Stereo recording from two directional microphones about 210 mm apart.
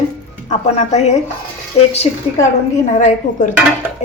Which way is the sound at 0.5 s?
35° left (ahead or behind).